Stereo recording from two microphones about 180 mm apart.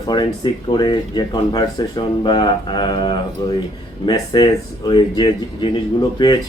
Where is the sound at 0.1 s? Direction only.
25° left (ahead or behind).